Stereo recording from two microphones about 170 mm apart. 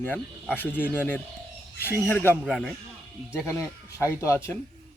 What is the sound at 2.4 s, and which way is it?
Speech, centre (ahead or behind).